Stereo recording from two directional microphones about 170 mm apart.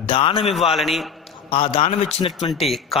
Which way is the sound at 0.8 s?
Centre (ahead or behind).